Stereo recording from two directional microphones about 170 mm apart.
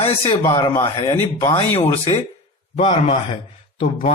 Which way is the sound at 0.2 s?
25° left (ahead or behind).